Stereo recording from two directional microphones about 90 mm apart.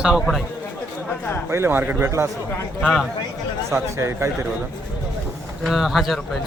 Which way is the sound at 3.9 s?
30° right (ahead or behind).